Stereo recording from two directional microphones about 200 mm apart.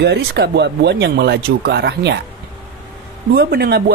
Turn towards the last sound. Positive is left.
turn(degrees=-50)  # may be behind; listen again after turning